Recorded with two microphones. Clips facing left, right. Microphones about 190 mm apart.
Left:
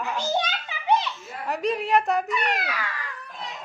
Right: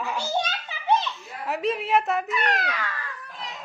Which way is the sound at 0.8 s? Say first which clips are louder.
Even; 15° left (ahead or behind).